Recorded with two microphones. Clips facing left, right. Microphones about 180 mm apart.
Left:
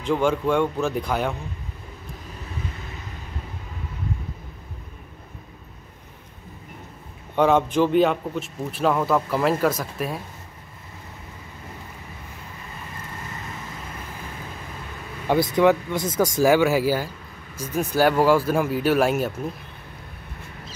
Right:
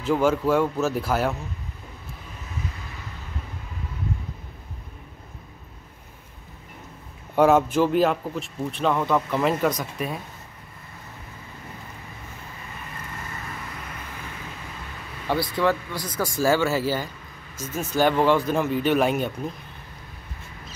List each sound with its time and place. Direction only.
0.0 s a man's voice: 5° right (ahead or behind)
7.3 s a man's voice: 5° right (ahead or behind)
15.2 s speech: 20° left (ahead or behind)